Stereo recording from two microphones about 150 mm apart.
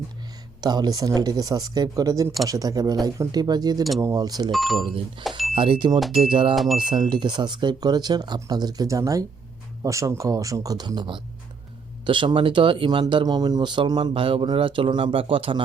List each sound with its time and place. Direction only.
0.6 s speech: 25° right (ahead or behind)
4.5 s speech: centre (ahead or behind)
4.8 s speech: 35° right (ahead or behind)